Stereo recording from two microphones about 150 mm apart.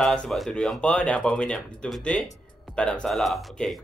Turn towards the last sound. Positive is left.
turn(degrees=0)  # may be behind; listen again after turning